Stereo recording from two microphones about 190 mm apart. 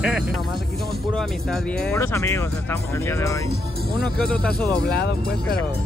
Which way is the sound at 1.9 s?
15° left (ahead or behind).